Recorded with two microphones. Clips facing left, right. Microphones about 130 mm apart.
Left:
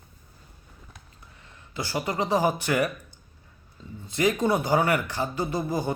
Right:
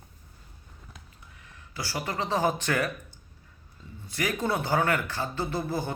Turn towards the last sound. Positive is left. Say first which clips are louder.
# left 3 dB
turn(degrees=15)  # may be behind; listen again after turning